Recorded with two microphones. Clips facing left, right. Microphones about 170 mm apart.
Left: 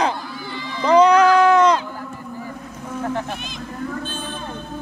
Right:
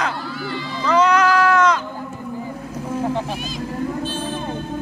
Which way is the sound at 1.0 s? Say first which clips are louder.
Left 2 dB; 35° left (ahead or behind).